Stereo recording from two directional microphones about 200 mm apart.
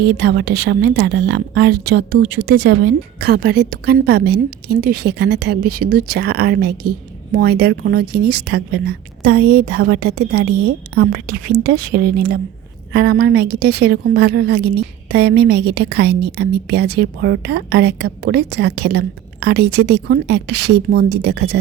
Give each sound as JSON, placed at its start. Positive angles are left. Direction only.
{"t": 0.0, "sound": "a woman's voice", "side_deg": -55}